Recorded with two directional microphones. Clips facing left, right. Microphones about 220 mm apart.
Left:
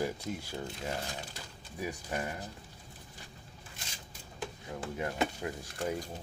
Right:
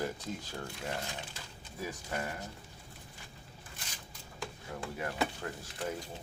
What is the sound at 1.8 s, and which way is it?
Speech, 15° left (ahead or behind).